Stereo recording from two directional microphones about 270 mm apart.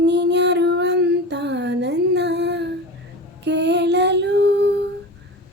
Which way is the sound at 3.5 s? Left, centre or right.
Right.